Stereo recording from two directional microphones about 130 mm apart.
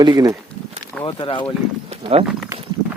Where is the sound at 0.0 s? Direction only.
30° right (ahead or behind).